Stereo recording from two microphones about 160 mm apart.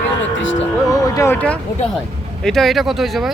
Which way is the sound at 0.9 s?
20° left (ahead or behind).